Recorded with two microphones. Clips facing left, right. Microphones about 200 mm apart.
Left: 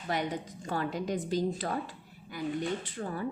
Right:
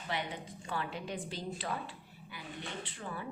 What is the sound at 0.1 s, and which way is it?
A woman's voice, 45° left (ahead or behind).